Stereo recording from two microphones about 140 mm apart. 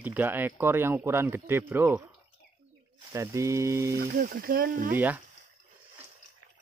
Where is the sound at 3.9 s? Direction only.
90° right.